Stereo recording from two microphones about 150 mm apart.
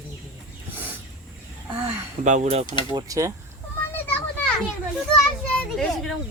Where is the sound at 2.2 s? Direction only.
50° right (ahead or behind).